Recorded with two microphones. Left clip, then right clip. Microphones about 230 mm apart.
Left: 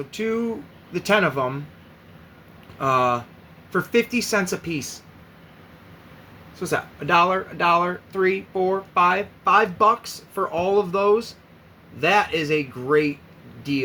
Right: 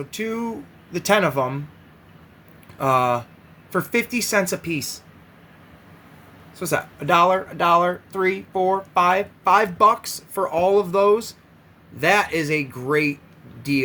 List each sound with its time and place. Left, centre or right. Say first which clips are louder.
0.0 s speech: left 2 dB; right
2.7 s speech: right 1 dB; right
6.6 s speech: right 1 dB; right